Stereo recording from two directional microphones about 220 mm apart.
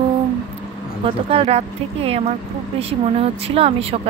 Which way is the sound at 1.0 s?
25° right (ahead or behind).